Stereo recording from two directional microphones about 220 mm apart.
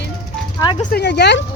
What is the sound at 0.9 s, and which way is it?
Speech, 45° left (ahead or behind).